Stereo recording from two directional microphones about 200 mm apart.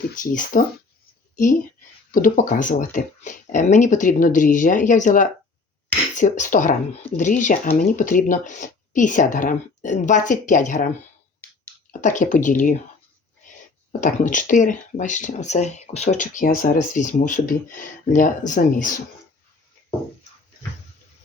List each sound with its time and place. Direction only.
0.2 s speech: 40° left (ahead or behind)
2.1 s speech: 45° left (ahead or behind)
14.0 s speech: 40° left (ahead or behind)